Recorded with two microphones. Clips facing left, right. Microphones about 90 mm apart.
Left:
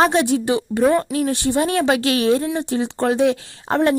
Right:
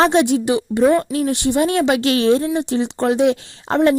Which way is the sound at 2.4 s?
20° left (ahead or behind).